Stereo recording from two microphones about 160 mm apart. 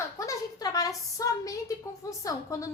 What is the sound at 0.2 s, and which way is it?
A woman's voice, 20° left (ahead or behind).